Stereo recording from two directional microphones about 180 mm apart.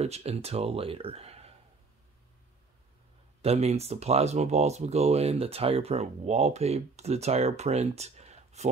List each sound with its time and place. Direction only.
0.0 s speech: 35° right (ahead or behind)
3.4 s speech: 35° right (ahead or behind)